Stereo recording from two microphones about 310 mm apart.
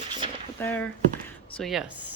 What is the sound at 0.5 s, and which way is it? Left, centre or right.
Speech, centre.